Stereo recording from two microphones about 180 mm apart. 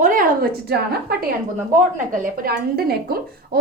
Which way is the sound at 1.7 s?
50° right (ahead or behind).